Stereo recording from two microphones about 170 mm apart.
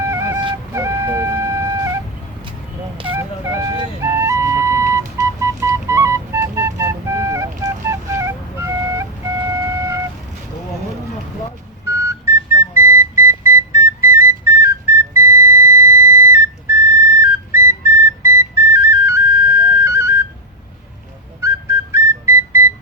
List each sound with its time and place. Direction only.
0.0 s flute: 15° right (ahead or behind)
3.5 s flute: 15° right (ahead or behind)
5.6 s music: 15° right (ahead or behind)
7.6 s flute: 15° right (ahead or behind)
11.9 s car alarm: 15° right (ahead or behind)
21.9 s music: 15° right (ahead or behind)